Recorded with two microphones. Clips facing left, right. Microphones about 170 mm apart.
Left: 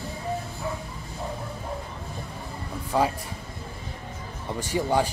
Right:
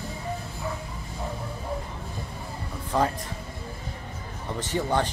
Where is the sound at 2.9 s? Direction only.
10° left (ahead or behind).